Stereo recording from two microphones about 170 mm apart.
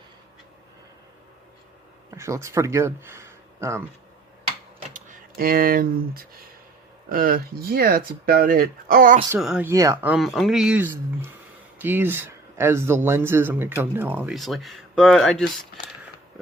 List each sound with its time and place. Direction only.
2.0 s speech: 15° right (ahead or behind)
4.9 s speech: 55° right (ahead or behind)
9.4 s speech: 5° right (ahead or behind)
9.6 s speech: 15° right (ahead or behind)
14.3 s speech: centre (ahead or behind)